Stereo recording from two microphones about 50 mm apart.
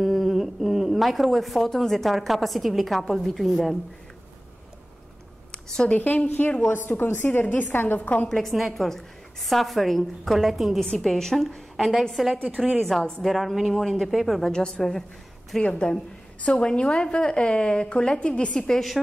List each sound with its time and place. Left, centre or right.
0.0 s a woman's voice: centre
5.9 s a woman's voice: left
8.3 s a woman's voice: centre
10.8 s a woman's voice: centre
11.7 s a woman's voice: centre
14.5 s a woman's voice: centre
15.6 s a woman's voice: left